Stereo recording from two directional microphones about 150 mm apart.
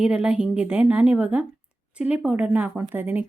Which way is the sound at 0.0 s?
5° right (ahead or behind).